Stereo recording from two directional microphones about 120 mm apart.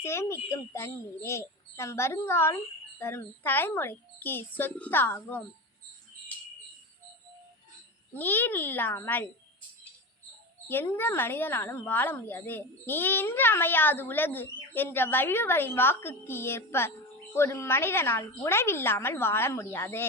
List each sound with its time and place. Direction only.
0.0 s a woman's voice: 20° left (ahead or behind)
6.3 s a sound: 10° left (ahead or behind)
8.1 s a woman's voice: 15° left (ahead or behind)
10.7 s a woman's voice: 15° left (ahead or behind)